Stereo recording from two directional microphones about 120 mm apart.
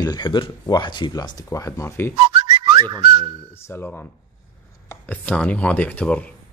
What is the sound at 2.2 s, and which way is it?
Whistling, 45° right (ahead or behind).